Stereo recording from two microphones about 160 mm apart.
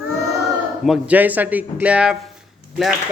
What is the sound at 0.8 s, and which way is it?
Speech, 5° right (ahead or behind).